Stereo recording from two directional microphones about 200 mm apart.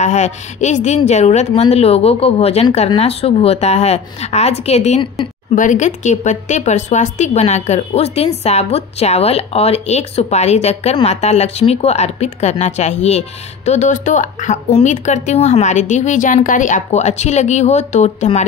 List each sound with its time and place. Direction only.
0.0 s speech: 35° left (ahead or behind)